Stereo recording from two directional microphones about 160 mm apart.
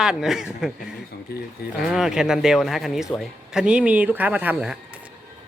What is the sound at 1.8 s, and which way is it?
A man's voice, 5° right (ahead or behind).